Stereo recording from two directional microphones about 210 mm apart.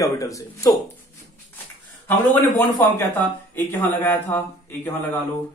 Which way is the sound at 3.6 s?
10° left (ahead or behind).